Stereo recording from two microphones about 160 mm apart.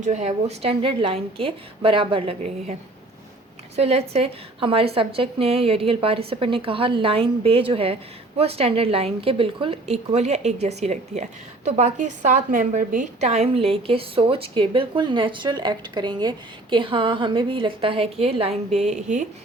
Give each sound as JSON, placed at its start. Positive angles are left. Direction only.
{"t": 0.0, "sound": "a woman's voice", "side_deg": -45}
{"t": 3.8, "sound": "a woman's voice", "side_deg": -40}